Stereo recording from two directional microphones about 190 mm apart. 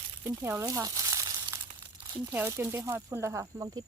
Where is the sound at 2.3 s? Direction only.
10° right (ahead or behind).